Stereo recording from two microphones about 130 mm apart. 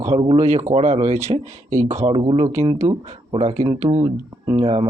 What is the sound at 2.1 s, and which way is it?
Speech, 40° right (ahead or behind).